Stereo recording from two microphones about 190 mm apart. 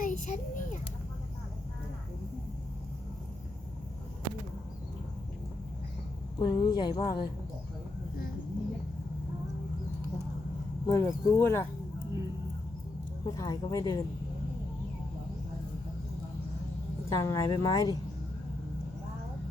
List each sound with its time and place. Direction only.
0.0 s a sound: 45° left (ahead or behind)
6.4 s speech: 25° left (ahead or behind)
10.8 s speech: 15° left (ahead or behind)
13.2 s speech: 20° left (ahead or behind)
17.1 s speech: 20° left (ahead or behind)